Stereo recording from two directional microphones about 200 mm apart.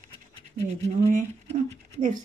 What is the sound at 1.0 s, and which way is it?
Speech, 35° right (ahead or behind).